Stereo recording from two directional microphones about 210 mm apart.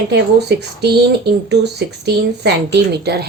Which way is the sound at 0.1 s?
55° right (ahead or behind).